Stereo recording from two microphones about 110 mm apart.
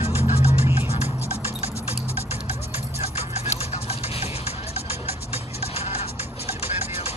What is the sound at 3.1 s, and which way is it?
Music, 65° left (ahead or behind).